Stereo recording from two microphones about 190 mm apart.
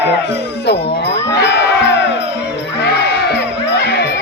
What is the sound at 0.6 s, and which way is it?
Music, 60° left (ahead or behind).